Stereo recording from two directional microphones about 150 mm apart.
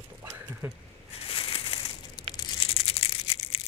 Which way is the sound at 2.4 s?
35° left (ahead or behind).